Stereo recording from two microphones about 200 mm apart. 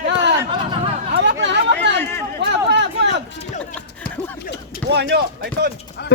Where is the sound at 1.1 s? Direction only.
60° right (ahead or behind).